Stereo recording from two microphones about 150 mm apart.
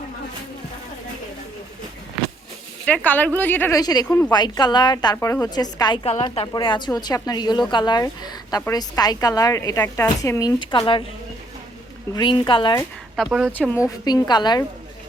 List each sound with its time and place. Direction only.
2.8 s speech: 10° left (ahead or behind)
3.8 s a woman's voice: 25° left (ahead or behind)
12.1 s speech: 30° left (ahead or behind)
13.2 s speech: 5° right (ahead or behind)
13.5 s a woman's voice: 15° left (ahead or behind)